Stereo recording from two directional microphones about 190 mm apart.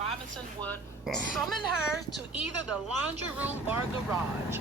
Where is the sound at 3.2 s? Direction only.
10° right (ahead or behind).